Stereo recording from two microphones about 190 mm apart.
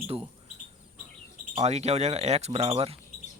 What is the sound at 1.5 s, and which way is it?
Speech, 35° right (ahead or behind).